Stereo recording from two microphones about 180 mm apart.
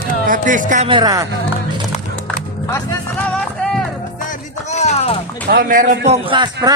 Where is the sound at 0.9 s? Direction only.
20° right (ahead or behind).